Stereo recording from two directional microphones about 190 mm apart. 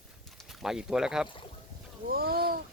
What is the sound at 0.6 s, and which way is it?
Speech, 5° right (ahead or behind).